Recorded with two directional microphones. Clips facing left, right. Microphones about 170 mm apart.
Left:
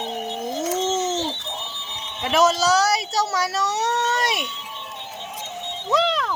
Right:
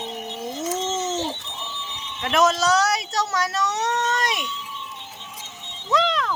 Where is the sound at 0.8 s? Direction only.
15° left (ahead or behind).